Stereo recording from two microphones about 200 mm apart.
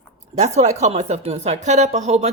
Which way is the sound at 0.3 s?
35° right (ahead or behind).